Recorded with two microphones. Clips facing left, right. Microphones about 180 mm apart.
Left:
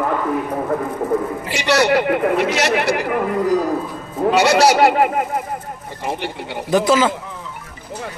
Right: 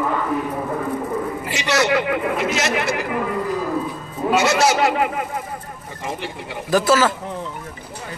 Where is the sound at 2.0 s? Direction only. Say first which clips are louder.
Left 4 dB; 60° left (ahead or behind).